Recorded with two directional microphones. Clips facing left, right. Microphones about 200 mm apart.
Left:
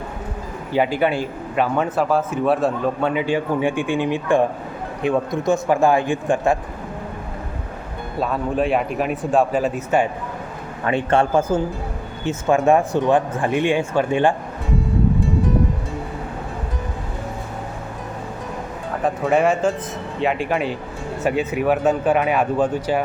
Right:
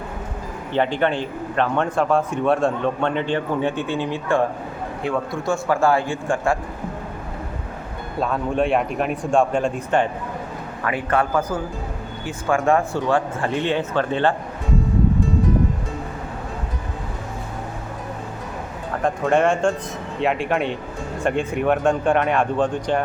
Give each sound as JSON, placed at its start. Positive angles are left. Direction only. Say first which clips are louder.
{"t": 0.7, "sound": "a man's voice", "louder": "left 1 dB", "side_deg": 10}
{"t": 8.2, "sound": "speech", "louder": "even", "side_deg": 0}
{"t": 10.8, "sound": "a man's voice", "louder": "left 3 dB", "side_deg": 25}
{"t": 19.0, "sound": "speech", "louder": "left 1 dB", "side_deg": 5}